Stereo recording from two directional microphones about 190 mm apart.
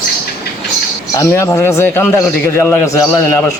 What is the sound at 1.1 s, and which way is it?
A man's voice, 15° left (ahead or behind).